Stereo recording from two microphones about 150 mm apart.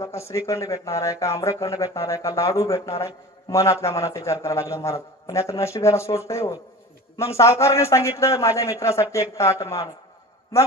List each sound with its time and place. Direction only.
0.0 s a man's voice: 20° left (ahead or behind)